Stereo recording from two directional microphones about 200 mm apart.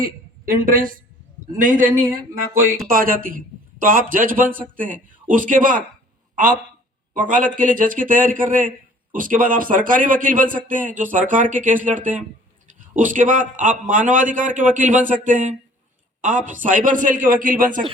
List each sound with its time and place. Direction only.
0.4 s a man's voice: 45° right (ahead or behind)
7.1 s a man's voice: 40° right (ahead or behind)